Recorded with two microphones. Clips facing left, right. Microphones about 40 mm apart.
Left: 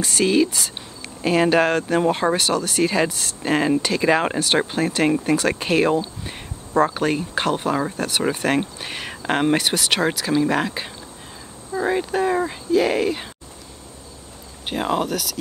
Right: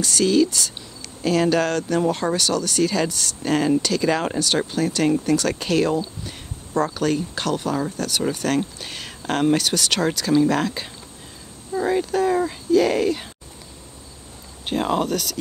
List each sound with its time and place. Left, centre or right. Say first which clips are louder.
0.0 s speech: even; left
14.7 s speech: right 1 dB; centre